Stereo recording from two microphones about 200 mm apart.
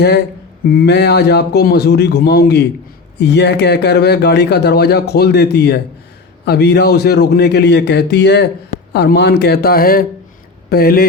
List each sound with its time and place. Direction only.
0.7 s a man's voice: 50° left (ahead or behind)